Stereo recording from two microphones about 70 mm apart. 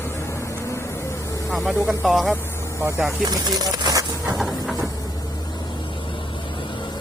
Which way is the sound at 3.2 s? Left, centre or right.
Right.